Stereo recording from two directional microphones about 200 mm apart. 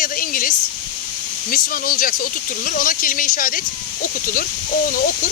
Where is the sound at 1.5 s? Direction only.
45° left (ahead or behind).